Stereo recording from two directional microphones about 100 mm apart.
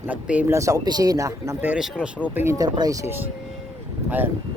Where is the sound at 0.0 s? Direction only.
15° right (ahead or behind).